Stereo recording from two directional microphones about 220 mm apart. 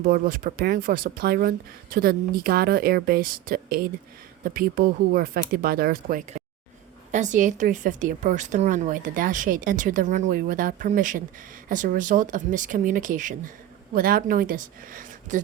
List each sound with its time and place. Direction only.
0.0 s a woman's voice: 40° right (ahead or behind)